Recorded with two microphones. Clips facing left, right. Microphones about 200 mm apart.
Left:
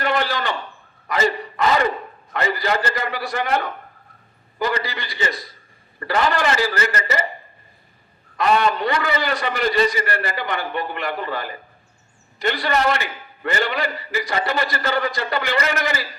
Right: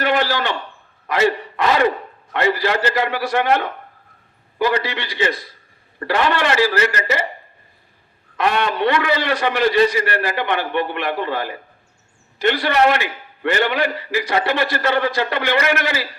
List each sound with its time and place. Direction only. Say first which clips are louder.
0.0 s a sound: right 3 dB; 75° right (ahead or behind)
1.0 s a man's voice: right 3 dB; 70° right (ahead or behind)
8.4 s a man's voice: even; 70° right (ahead or behind)